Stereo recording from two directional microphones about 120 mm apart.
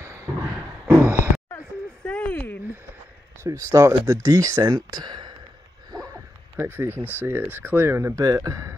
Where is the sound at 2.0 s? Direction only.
10° left (ahead or behind).